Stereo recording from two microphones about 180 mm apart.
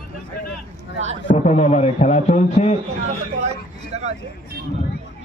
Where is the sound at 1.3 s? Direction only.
35° left (ahead or behind).